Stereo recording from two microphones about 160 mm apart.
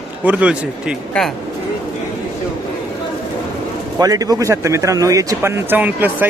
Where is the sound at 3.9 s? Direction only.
20° right (ahead or behind).